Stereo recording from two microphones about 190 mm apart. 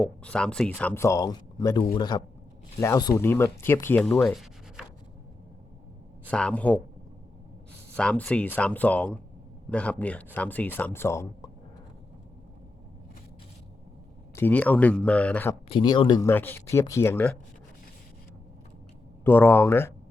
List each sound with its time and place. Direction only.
0.0 s speech: 5° left (ahead or behind)
6.3 s speech: 5° left (ahead or behind)
7.9 s speech: 5° left (ahead or behind)
14.3 s speech: 10° left (ahead or behind)
15.7 s speech: 25° left (ahead or behind)
19.2 s speech: 10° left (ahead or behind)